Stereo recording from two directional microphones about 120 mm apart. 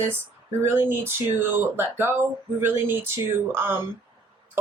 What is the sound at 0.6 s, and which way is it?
Speech, 20° right (ahead or behind).